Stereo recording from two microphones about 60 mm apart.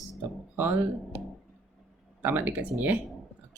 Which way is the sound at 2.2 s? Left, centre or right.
Right.